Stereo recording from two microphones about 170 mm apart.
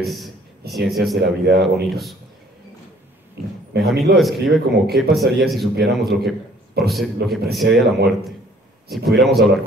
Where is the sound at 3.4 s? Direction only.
70° right (ahead or behind).